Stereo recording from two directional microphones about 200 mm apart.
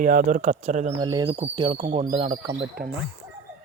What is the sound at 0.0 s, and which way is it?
Speech, 40° right (ahead or behind).